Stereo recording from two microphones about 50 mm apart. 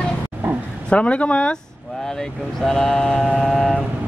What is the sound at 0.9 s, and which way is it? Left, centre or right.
Speech, left.